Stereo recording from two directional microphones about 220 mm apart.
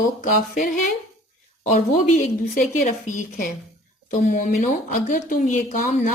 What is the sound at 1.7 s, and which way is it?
Speech, 35° left (ahead or behind).